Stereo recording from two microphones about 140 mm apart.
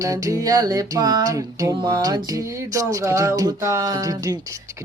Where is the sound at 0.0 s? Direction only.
25° right (ahead or behind).